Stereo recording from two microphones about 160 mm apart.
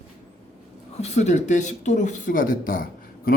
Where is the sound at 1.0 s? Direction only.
45° left (ahead or behind).